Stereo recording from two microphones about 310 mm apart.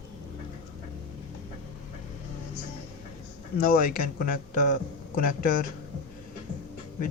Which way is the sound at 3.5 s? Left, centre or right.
Left.